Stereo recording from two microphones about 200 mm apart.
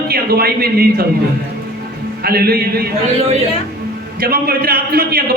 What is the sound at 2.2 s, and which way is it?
Speech, 50° right (ahead or behind).